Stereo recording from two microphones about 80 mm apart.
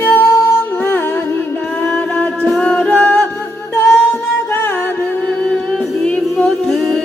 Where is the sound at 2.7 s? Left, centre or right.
Centre.